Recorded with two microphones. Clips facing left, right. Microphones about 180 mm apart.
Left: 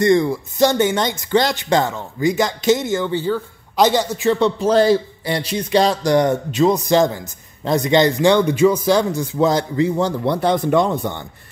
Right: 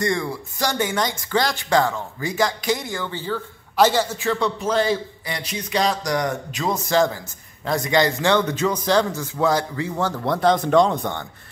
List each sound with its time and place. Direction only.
0.0 s speech: 20° left (ahead or behind)
4.6 s a man's voice: 35° left (ahead or behind); by 10.1 s 20° left (ahead or behind)
10.7 s speech: 10° left (ahead or behind)